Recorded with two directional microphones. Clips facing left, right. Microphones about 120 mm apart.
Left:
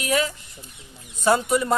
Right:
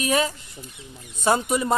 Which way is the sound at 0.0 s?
30° right (ahead or behind).